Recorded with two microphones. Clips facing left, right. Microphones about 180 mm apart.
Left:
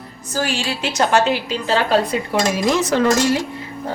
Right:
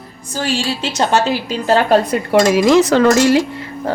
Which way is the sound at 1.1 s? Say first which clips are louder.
Right 1 dB; 35° right (ahead or behind).